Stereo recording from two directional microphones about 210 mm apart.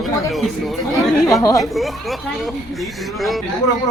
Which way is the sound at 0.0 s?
Centre (ahead or behind).